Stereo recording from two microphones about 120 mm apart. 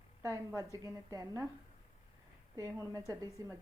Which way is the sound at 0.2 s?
25° right (ahead or behind).